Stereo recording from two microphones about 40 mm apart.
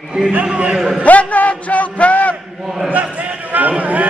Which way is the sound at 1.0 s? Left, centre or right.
Left.